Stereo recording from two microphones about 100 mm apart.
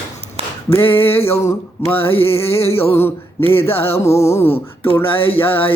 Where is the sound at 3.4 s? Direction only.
70° left (ahead or behind).